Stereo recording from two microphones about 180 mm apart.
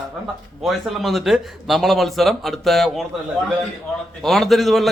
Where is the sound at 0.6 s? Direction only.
Centre (ahead or behind).